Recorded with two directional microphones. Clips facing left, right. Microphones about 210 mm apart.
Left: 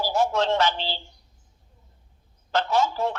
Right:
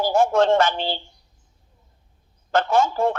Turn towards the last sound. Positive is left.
turn(degrees=-50)  # may be behind; listen again after turning